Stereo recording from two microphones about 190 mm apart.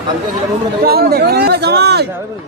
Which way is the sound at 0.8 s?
55° right (ahead or behind).